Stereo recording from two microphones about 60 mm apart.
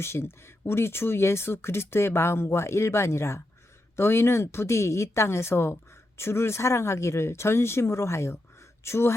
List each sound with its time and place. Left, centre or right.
0.0 s speech: left